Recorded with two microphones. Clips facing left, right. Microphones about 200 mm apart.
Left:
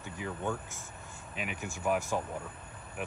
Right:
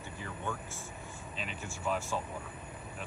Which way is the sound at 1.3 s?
10° left (ahead or behind).